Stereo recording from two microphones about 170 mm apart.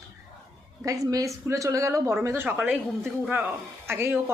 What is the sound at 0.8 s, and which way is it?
A woman's voice, 20° right (ahead or behind).